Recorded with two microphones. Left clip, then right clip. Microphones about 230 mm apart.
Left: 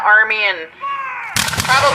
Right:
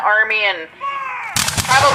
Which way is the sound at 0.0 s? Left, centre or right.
Left.